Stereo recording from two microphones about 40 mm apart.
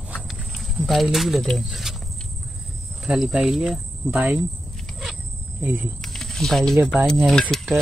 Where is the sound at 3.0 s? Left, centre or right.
Centre.